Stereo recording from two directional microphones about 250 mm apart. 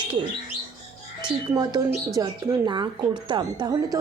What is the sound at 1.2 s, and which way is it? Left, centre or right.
A woman's voice, centre.